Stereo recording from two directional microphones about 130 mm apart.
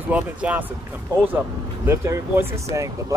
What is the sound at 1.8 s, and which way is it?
Speech, 20° right (ahead or behind).